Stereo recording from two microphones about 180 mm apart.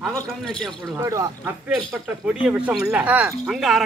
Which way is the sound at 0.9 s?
15° right (ahead or behind).